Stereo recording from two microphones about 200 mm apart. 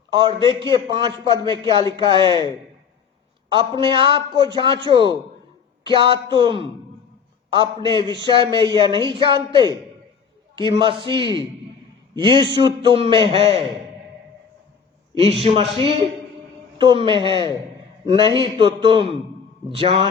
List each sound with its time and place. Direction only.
0.1 s a man's voice: 25° right (ahead or behind)
3.5 s a man's voice: 25° right (ahead or behind)
7.8 s a man's voice: 25° right (ahead or behind)
15.2 s a man's voice: 30° right (ahead or behind)